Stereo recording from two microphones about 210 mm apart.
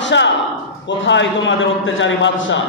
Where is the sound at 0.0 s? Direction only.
60° left (ahead or behind).